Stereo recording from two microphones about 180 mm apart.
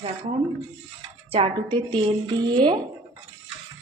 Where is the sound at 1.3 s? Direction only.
30° right (ahead or behind).